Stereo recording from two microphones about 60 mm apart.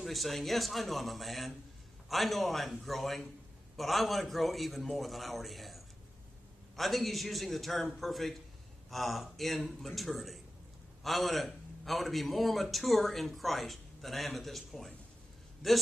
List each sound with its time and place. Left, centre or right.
0.0 s a man's voice: centre
6.8 s a man's voice: centre